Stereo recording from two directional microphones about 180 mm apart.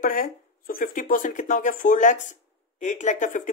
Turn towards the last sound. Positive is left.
turn(degrees=45)  # may be behind; listen again after turning